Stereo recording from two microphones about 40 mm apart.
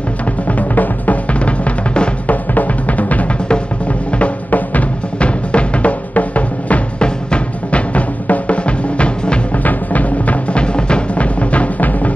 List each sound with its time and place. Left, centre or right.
0.5 s drum: left
4.5 s music: left
5.2 s music: left
7.0 s music: left
9.6 s music: left
10.6 s music: left